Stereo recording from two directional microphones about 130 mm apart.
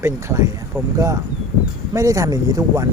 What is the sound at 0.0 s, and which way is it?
Speech, 20° right (ahead or behind).